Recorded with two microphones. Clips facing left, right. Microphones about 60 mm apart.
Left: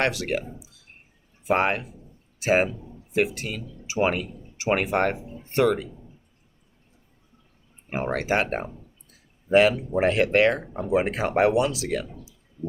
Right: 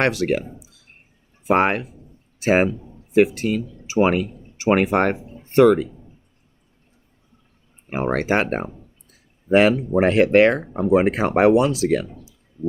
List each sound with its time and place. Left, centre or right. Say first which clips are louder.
0.0 s speech: right 5 dB; right
2.4 s speech: right 4 dB; right
4.7 s speech: right 5 dB; right
7.9 s speech: right 4 dB; right